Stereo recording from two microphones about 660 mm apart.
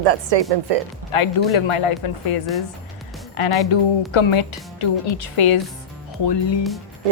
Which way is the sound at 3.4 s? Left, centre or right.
Left.